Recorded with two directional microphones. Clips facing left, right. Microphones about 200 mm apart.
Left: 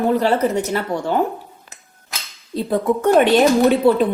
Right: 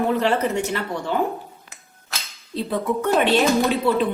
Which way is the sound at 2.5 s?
45° left (ahead or behind).